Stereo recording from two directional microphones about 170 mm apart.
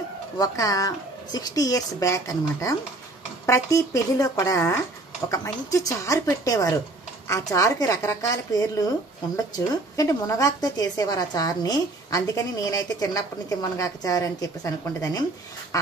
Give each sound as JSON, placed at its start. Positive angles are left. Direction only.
{"t": 0.4, "sound": "a woman's voice", "side_deg": 20}
{"t": 9.9, "sound": "a woman's voice", "side_deg": 20}
{"t": 15.7, "sound": "duck", "side_deg": 20}